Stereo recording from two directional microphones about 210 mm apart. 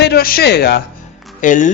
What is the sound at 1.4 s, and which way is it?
Speech, 40° left (ahead or behind).